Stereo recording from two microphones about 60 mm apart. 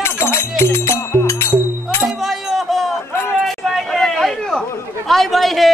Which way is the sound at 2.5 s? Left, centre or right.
Centre.